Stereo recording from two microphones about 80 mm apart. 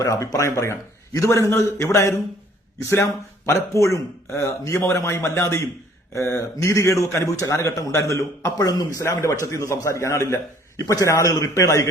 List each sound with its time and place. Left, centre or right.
0.0 s a man's voice: left